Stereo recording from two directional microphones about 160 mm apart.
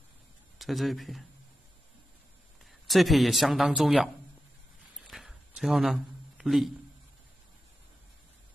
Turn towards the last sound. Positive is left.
turn(degrees=0)  # may be behind; listen again after turning